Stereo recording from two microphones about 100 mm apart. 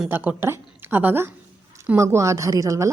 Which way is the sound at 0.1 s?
20° right (ahead or behind).